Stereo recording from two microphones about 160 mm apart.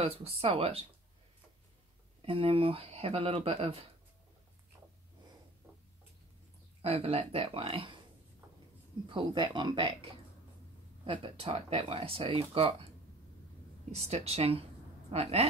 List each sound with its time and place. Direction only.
0.0 s speech: 35° right (ahead or behind)
2.2 s speech: 35° right (ahead or behind)
6.8 s speech: 40° right (ahead or behind)
9.1 s speech: 30° right (ahead or behind)
13.9 s speech: 40° right (ahead or behind)